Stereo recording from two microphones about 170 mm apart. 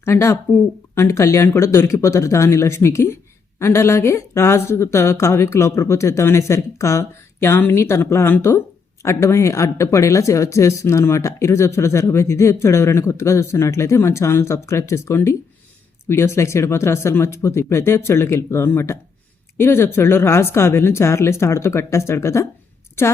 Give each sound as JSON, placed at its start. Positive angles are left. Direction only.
{"t": 0.0, "sound": "speech", "side_deg": 15}